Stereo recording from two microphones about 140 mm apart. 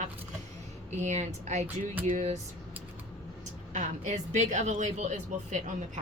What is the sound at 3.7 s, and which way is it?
A woman's voice, 55° right (ahead or behind).